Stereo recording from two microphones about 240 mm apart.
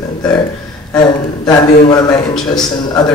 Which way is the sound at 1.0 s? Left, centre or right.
Centre.